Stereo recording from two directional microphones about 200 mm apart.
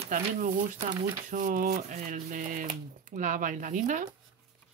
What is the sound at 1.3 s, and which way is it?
Speech, 45° right (ahead or behind).